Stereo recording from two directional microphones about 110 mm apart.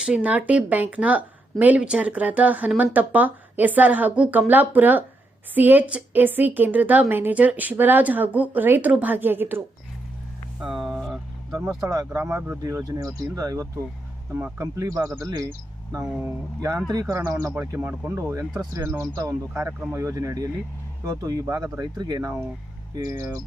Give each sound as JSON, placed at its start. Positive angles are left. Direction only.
{"t": 0.0, "sound": "speech", "side_deg": -10}
{"t": 10.6, "sound": "a sound", "side_deg": -5}
{"t": 11.8, "sound": "speech", "side_deg": -30}
{"t": 17.7, "sound": "speech", "side_deg": -15}
{"t": 18.2, "sound": "speech", "side_deg": -25}